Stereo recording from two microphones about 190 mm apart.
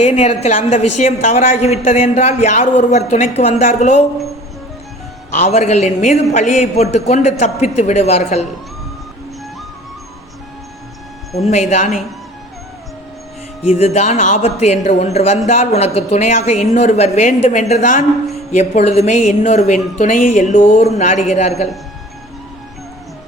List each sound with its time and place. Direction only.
0.0 s a woman's voice: 35° left (ahead or behind)
5.3 s a woman's voice: 40° left (ahead or behind)
11.7 s a woman's voice: 40° left (ahead or behind)
13.7 s a woman's voice: 35° left (ahead or behind)